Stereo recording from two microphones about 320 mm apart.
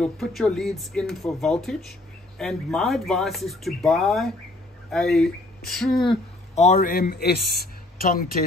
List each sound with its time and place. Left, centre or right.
0.0 s speech: centre
6.0 s speech: left